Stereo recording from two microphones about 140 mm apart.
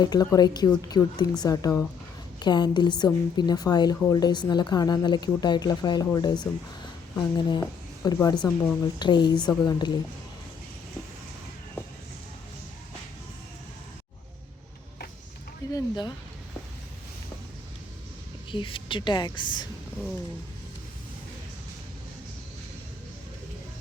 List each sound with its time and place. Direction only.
0.0 s a woman's voice: 30° left (ahead or behind)
15.7 s speech: 30° left (ahead or behind)
18.5 s a woman's voice: 35° left (ahead or behind)